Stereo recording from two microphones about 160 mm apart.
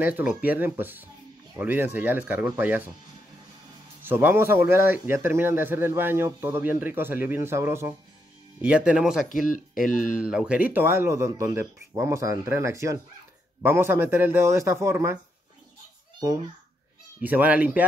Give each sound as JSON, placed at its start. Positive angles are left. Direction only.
{"t": 0.0, "sound": "speech", "side_deg": -10}
{"t": 4.0, "sound": "speech", "side_deg": -10}
{"t": 9.5, "sound": "speech", "side_deg": 55}
{"t": 10.2, "sound": "speech", "side_deg": -5}
{"t": 16.2, "sound": "a child's voice", "side_deg": -20}
{"t": 17.2, "sound": "speech", "side_deg": -10}